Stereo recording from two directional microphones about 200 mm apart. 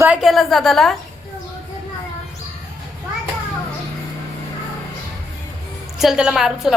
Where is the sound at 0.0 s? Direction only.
5° right (ahead or behind).